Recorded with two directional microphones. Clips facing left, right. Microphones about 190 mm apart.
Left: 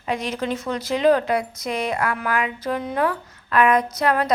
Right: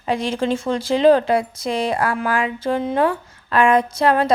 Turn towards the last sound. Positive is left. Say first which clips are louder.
# right 4 dB
turn(degrees=-30)  # may be behind; listen again after turning